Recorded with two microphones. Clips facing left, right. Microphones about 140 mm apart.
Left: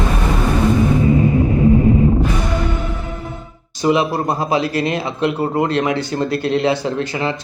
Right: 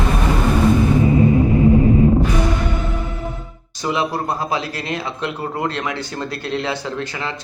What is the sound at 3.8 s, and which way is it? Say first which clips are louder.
Speech: left 5 dB; 20° left (ahead or behind).